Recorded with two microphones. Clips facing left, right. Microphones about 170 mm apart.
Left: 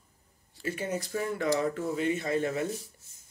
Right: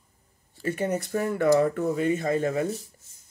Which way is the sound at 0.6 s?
55° right (ahead or behind).